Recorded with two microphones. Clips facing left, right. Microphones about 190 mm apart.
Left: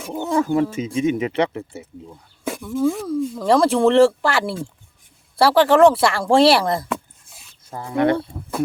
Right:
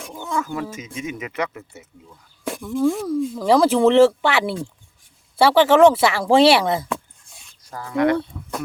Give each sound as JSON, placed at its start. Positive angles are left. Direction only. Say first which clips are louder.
{"t": 0.2, "sound": "speech", "louder": "left 7 dB", "side_deg": 30}
{"t": 2.4, "sound": "speech", "louder": "even", "side_deg": 0}
{"t": 7.7, "sound": "speech", "louder": "even", "side_deg": 25}